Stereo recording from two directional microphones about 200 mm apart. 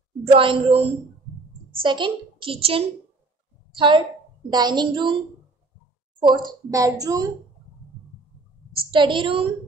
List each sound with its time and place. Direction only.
0.2 s a woman's voice: 25° right (ahead or behind)
6.1 s a woman's voice: 20° right (ahead or behind)
8.9 s a woman's voice: 25° right (ahead or behind)